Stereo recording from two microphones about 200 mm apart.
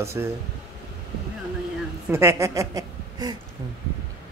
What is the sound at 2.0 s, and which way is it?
Speech, 15° right (ahead or behind).